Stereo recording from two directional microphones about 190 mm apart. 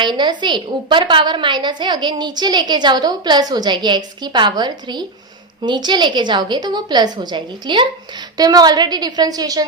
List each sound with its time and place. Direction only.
0.0 s a woman's voice: 25° right (ahead or behind)